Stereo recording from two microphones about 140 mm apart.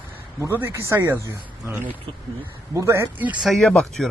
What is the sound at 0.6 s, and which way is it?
Speech, 20° right (ahead or behind).